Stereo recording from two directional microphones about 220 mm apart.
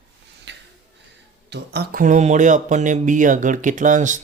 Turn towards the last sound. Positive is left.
turn(degrees=-35)  # may be behind; listen again after turning